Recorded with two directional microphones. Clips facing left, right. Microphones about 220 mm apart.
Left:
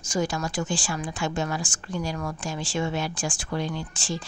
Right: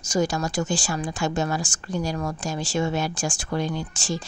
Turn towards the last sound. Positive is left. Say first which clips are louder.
# right 3 dB
turn(degrees=-45)  # may be behind; listen again after turning